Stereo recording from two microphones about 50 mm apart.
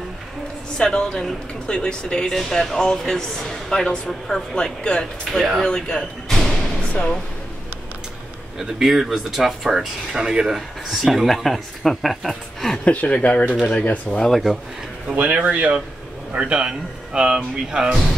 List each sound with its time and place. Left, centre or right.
0.7 s speech: centre
6.3 s thump: centre
6.8 s music: left
8.5 s speech: centre
12.8 s speech: left
14.3 s speech: centre
15.1 s speech: right